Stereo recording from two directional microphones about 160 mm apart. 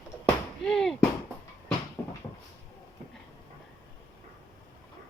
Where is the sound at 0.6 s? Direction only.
5° left (ahead or behind).